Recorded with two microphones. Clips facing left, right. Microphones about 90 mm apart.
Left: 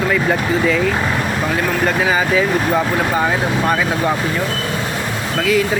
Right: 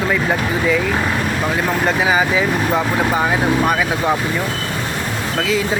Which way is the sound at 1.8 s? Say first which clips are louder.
Right 1 dB; 15° right (ahead or behind).